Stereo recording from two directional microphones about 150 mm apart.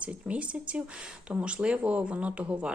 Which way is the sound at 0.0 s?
10° right (ahead or behind).